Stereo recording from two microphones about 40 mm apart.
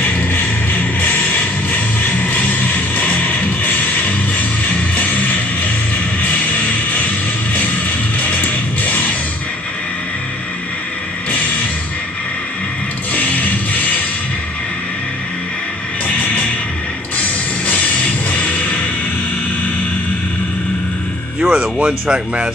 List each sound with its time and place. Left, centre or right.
0.1 s a sound: left
0.9 s music: left
8.3 s music: left
13.1 s music: left
16.2 s music: left
18.3 s music: left
21.4 s music: centre
22.1 s speech: right